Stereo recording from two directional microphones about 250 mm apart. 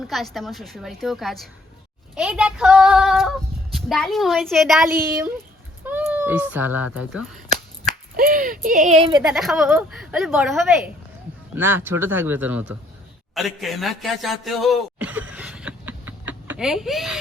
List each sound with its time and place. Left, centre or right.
0.0 s female singing: centre
5.8 s speech: centre
8.1 s speech: right
9.2 s female singing: centre
11.5 s speech: centre
13.3 s a sound: centre